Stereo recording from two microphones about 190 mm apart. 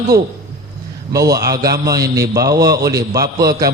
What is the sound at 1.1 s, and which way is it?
A man's voice, 20° right (ahead or behind).